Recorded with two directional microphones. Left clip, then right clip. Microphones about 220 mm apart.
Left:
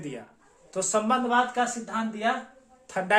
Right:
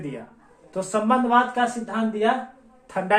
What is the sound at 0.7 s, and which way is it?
Speech, 20° left (ahead or behind).